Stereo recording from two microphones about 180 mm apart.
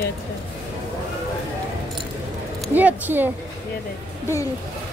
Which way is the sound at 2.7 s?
10° right (ahead or behind).